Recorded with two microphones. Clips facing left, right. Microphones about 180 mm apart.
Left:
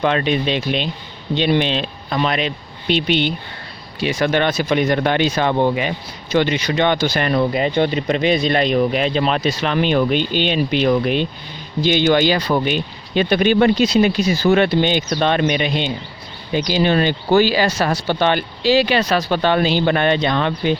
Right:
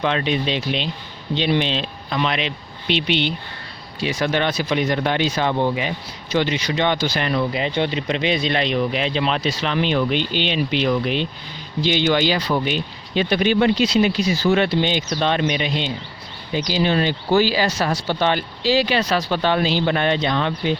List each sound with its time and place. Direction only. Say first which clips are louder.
0.0 s speech: left 3 dB; 50° left (ahead or behind)
2.1 s speech: left 3 dB; 45° left (ahead or behind)